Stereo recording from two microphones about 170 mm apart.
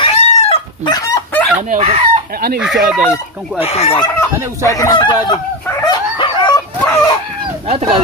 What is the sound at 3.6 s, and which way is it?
Chicken, 35° left (ahead or behind).